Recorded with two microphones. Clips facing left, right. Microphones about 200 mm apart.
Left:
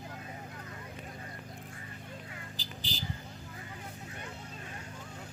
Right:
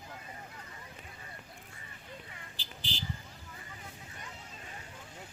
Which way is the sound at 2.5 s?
40° left (ahead or behind).